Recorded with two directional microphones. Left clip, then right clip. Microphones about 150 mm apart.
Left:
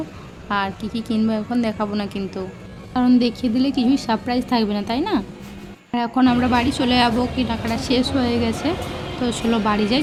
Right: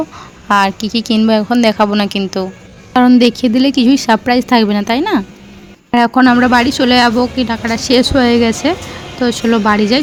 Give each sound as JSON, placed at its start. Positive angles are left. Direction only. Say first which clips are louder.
{"t": 0.4, "sound": "a woman's voice", "louder": "right 11 dB", "side_deg": -50}
{"t": 2.9, "sound": "a woman's voice", "louder": "right 9 dB", "side_deg": -55}